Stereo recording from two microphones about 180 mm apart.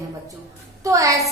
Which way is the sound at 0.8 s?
20° right (ahead or behind).